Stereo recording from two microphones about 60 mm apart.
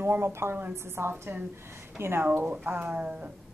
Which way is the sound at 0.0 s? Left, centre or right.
Right.